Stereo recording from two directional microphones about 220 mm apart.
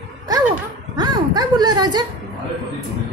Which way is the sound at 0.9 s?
20° right (ahead or behind).